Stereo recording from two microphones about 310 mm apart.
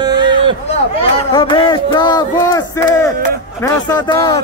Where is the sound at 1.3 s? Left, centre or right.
Centre.